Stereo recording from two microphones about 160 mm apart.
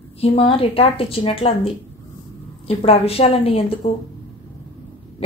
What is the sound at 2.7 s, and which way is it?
A woman's voice, 35° left (ahead or behind).